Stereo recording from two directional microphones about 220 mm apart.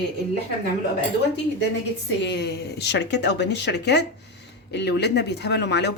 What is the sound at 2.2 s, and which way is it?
Dishes, 50° left (ahead or behind).